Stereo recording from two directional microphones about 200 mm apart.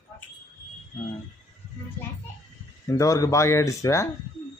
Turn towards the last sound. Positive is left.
turn(degrees=15)  # may be behind; listen again after turning